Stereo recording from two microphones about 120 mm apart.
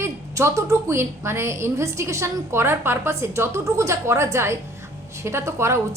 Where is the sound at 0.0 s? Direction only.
25° right (ahead or behind).